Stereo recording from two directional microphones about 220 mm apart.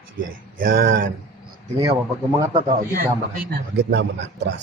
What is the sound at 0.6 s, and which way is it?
Speech, 40° right (ahead or behind).